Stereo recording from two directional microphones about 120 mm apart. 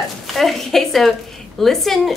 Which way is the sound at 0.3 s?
Centre (ahead or behind).